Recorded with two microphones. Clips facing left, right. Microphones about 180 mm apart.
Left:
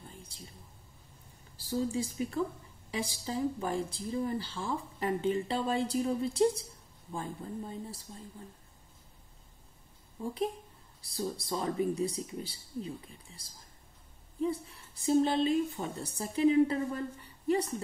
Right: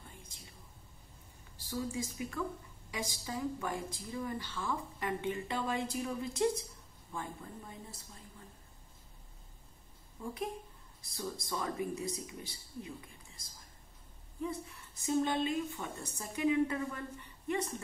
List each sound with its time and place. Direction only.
1.6 s speech: 30° left (ahead or behind)
10.2 s speech: 30° left (ahead or behind)